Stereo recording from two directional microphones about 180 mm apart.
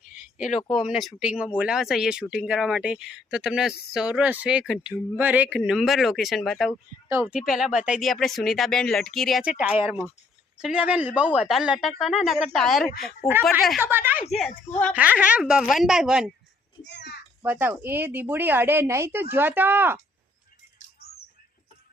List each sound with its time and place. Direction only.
0.3 s speech: 45° left (ahead or behind)
0.8 s speech: centre (ahead or behind)
7.1 s speech: 15° right (ahead or behind)
7.3 s speech: centre (ahead or behind)
13.7 s speech: 10° right (ahead or behind)
16.8 s a child's voice: 70° left (ahead or behind)
17.4 s speech: 10° right (ahead or behind)
21.0 s bird: 60° left (ahead or behind)